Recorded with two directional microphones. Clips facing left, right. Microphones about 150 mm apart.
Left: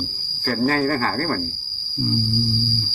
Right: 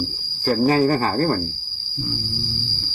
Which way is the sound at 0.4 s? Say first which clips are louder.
Right 3 dB; 15° right (ahead or behind).